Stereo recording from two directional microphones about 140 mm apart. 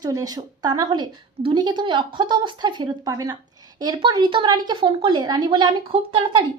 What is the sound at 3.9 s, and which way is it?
A woman's voice, 35° right (ahead or behind).